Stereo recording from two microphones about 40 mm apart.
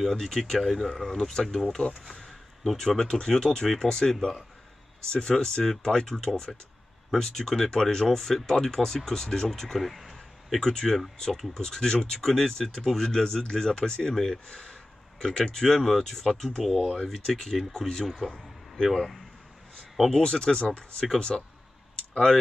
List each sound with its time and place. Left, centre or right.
0.0 s speech: centre
2.0 s a sound: centre
2.8 s speech: centre
14.1 s speech: centre
14.5 s speech: centre
20.1 s speech: centre